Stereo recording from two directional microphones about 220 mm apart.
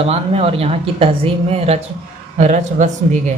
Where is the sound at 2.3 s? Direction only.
35° right (ahead or behind).